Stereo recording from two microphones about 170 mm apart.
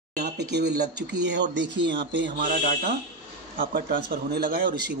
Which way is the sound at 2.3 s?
50° right (ahead or behind).